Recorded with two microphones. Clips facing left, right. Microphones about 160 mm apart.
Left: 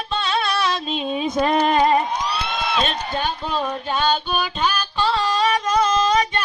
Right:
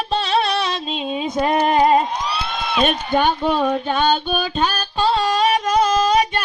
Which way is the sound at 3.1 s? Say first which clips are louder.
Right 7 dB; 65° right (ahead or behind).